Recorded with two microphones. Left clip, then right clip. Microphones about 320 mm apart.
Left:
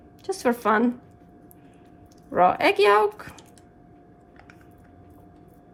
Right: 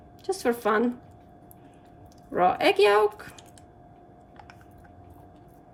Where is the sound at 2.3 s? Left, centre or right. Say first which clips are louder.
Left 3 dB; centre.